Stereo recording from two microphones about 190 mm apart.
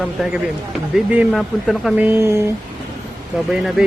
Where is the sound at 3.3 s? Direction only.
Centre (ahead or behind).